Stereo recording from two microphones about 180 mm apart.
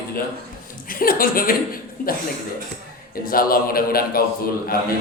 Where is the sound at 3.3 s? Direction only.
55° left (ahead or behind).